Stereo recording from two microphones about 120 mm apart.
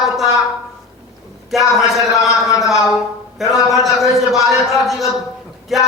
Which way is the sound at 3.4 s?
Centre (ahead or behind).